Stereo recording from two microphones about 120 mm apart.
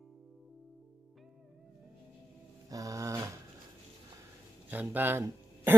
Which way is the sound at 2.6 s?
30° right (ahead or behind).